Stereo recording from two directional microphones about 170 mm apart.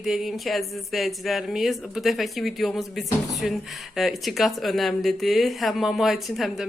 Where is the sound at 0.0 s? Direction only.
Centre (ahead or behind).